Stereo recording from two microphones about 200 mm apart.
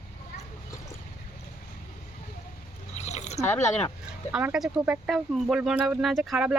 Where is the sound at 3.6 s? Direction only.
35° left (ahead or behind).